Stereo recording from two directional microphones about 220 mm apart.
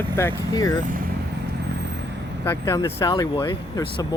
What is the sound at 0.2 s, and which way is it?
Speech, 15° left (ahead or behind).